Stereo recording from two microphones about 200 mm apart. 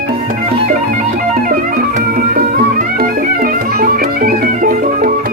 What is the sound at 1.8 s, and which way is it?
Music, 45° right (ahead or behind).